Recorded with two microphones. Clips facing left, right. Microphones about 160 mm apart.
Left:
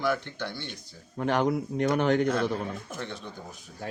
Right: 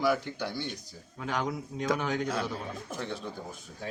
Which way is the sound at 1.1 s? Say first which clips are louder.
Left 7 dB; 60° left (ahead or behind).